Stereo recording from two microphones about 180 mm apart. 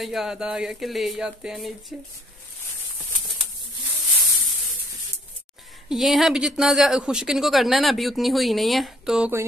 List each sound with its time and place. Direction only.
0.0 s speech: centre (ahead or behind)
5.9 s speech: centre (ahead or behind)